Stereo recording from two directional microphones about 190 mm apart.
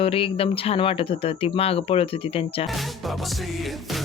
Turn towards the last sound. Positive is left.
turn(degrees=0)  # may be behind; listen again after turning